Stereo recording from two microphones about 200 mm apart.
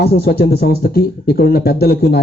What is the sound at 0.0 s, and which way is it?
Speech, 50° left (ahead or behind).